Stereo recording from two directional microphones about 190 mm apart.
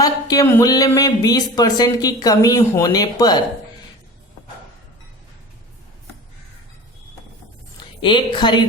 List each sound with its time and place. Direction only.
0.0 s speech: 20° left (ahead or behind)
8.0 s speech: 25° left (ahead or behind)